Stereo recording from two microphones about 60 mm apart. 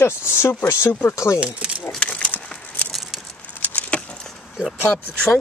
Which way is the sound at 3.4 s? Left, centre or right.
Left.